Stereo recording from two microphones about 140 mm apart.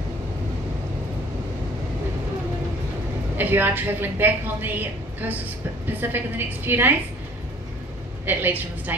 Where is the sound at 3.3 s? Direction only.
15° right (ahead or behind).